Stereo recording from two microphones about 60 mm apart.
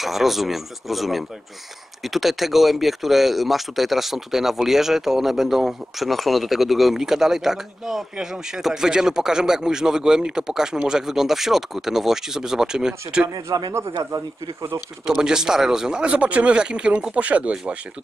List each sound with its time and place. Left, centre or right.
0.0 s speech: centre
13.3 s speech: right
15.0 s speech: centre